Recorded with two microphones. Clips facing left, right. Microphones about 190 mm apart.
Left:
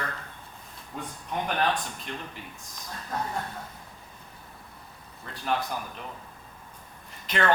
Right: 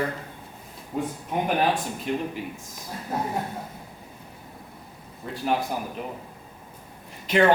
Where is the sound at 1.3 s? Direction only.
10° right (ahead or behind).